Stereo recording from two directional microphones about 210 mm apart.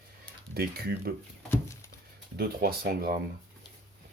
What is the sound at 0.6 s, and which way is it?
Speech, 50° right (ahead or behind).